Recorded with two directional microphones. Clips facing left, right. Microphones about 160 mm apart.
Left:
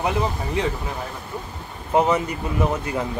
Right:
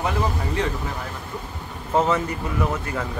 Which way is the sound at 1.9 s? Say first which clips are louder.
Left 2 dB; 15° left (ahead or behind).